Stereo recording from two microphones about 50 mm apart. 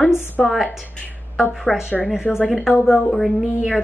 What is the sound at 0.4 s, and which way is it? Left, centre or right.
Speech, centre.